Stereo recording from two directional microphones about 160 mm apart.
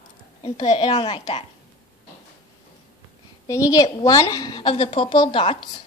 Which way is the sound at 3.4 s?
20° left (ahead or behind).